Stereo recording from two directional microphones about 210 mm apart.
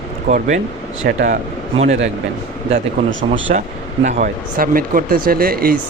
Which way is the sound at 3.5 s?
35° right (ahead or behind).